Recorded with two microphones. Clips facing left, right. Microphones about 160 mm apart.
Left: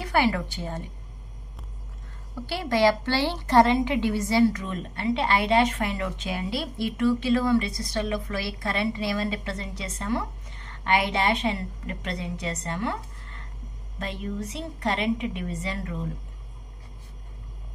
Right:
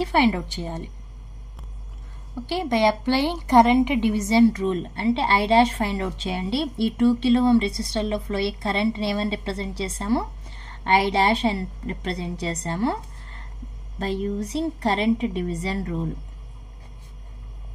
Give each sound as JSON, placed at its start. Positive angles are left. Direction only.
{"t": 0.0, "sound": "a woman's voice", "side_deg": -20}
{"t": 2.4, "sound": "a woman's voice", "side_deg": -20}